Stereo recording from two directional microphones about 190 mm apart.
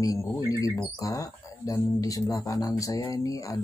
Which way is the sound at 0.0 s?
15° left (ahead or behind).